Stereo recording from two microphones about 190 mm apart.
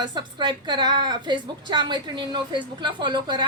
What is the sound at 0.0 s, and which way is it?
A woman's voice, 25° right (ahead or behind).